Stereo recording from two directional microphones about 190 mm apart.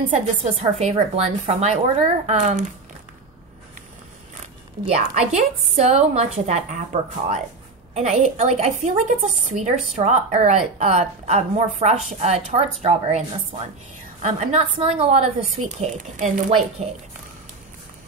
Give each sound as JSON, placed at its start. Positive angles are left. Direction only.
{"t": 0.4, "sound": "a woman's voice", "side_deg": -30}
{"t": 4.8, "sound": "a woman's voice", "side_deg": -35}